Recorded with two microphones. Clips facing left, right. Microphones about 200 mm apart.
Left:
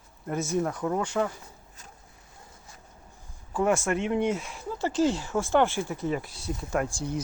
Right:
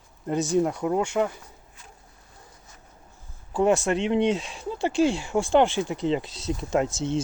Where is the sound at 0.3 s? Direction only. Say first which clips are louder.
Right 5 dB; 15° right (ahead or behind).